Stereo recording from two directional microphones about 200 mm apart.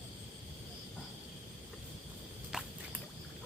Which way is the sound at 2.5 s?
5° right (ahead or behind).